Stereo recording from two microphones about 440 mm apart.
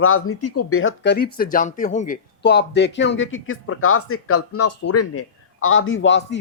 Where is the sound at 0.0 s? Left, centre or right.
Left.